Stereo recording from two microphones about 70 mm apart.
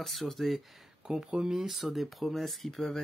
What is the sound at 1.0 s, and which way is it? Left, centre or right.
Speech, centre.